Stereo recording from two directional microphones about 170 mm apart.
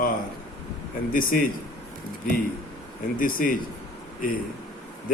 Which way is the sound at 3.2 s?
55° left (ahead or behind).